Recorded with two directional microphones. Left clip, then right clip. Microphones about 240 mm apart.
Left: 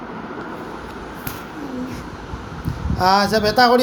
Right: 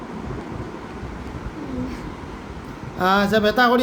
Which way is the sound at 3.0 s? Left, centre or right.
Centre.